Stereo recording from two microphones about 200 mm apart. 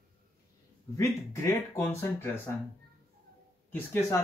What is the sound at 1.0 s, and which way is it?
Speech, 15° left (ahead or behind).